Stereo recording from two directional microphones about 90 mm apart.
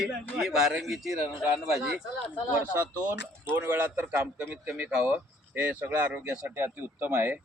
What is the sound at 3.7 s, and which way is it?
Speech, 20° right (ahead or behind).